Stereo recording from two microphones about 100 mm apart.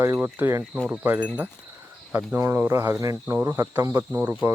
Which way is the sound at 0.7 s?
10° right (ahead or behind).